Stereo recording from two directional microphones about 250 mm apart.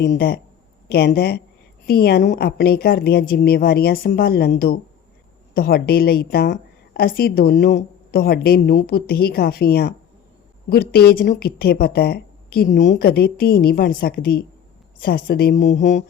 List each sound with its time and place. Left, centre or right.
0.0 s a woman's voice: left